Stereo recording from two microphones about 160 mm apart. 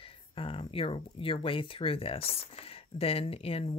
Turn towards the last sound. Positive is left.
turn(degrees=35)  # may be behind; listen again after turning